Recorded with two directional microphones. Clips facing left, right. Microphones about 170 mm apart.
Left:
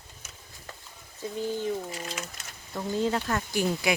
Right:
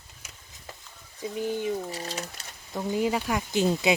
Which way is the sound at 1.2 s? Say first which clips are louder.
Right 1 dB; 15° right (ahead or behind).